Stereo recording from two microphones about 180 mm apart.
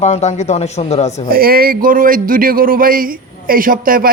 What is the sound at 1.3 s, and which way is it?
A man's voice, 55° right (ahead or behind).